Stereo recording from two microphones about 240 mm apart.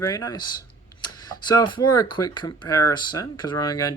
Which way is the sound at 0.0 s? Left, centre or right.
Centre.